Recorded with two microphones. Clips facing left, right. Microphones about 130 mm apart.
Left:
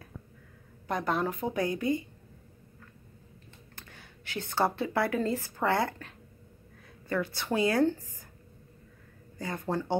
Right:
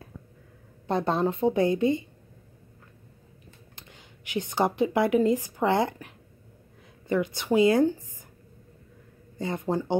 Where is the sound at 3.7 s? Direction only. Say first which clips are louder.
Even; 20° right (ahead or behind).